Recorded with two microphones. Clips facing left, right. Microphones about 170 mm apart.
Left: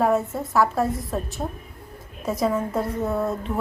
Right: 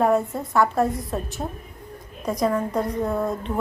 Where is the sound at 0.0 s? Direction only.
Centre (ahead or behind).